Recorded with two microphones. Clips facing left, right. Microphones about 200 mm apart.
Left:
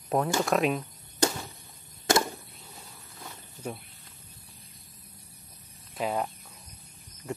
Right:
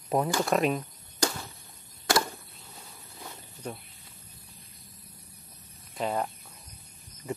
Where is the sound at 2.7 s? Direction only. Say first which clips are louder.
Right 2 dB; centre (ahead or behind).